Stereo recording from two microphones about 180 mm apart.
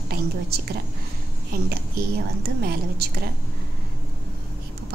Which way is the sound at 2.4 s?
60° right (ahead or behind).